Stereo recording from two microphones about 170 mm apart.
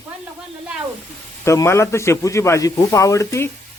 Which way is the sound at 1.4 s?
15° left (ahead or behind).